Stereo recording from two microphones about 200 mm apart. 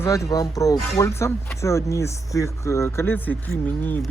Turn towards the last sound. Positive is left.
turn(degrees=10)  # may be behind; listen again after turning